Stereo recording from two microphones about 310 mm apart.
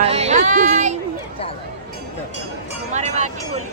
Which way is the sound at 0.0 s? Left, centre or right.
Centre.